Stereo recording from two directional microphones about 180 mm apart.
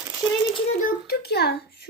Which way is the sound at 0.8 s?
60° left (ahead or behind).